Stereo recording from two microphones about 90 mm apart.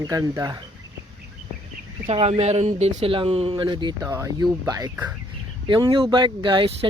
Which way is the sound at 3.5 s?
65° right (ahead or behind).